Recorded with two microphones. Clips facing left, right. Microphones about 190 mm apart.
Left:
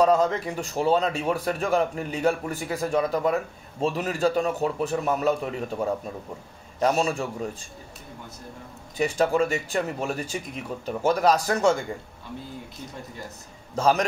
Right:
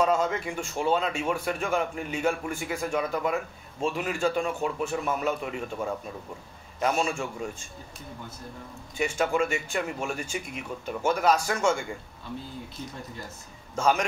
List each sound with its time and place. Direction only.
0.0 s a man's voice: 35° left (ahead or behind)
8.9 s a man's voice: 35° left (ahead or behind)
13.7 s a man's voice: 35° left (ahead or behind)